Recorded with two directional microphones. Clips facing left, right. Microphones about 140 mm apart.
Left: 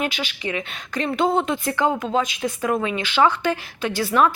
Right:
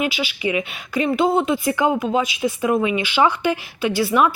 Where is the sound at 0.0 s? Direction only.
5° right (ahead or behind).